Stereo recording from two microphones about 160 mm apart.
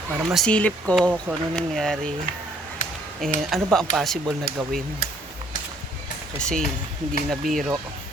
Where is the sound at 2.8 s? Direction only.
50° left (ahead or behind).